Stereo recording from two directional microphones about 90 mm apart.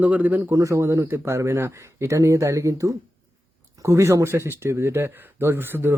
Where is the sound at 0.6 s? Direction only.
35° right (ahead or behind).